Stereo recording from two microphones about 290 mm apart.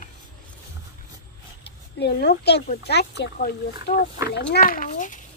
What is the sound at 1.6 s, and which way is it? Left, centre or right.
A child's voice, left.